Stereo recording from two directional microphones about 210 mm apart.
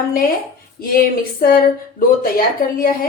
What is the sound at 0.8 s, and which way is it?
Speech, 45° left (ahead or behind).